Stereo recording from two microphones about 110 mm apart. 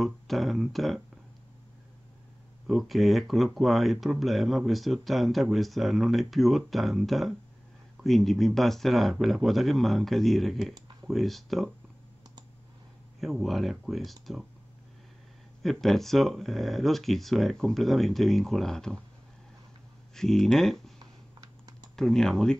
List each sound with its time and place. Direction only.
0.0 s speech: centre (ahead or behind)
2.6 s speech: centre (ahead or behind)
13.2 s speech: centre (ahead or behind)
15.6 s speech: centre (ahead or behind)
20.2 s speech: 5° left (ahead or behind)
21.0 s typing: 35° right (ahead or behind)
21.9 s speech: 5° left (ahead or behind)